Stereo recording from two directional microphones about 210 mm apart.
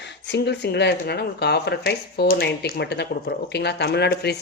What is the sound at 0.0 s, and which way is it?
Speech, 55° left (ahead or behind).